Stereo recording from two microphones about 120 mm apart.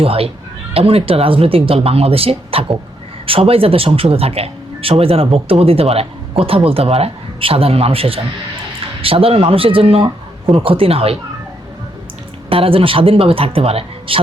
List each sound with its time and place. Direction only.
0.0 s speech: 55° right (ahead or behind)
12.5 s speech: 50° right (ahead or behind)